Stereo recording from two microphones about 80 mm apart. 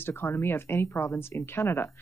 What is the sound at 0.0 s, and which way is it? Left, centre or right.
Speech, left.